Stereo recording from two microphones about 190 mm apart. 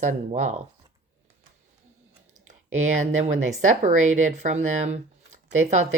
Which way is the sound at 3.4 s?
40° right (ahead or behind).